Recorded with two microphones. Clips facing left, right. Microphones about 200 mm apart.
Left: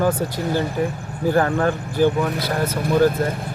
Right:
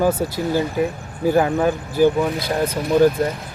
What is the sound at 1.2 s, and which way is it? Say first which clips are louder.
Speech: right 2 dB; 10° right (ahead or behind).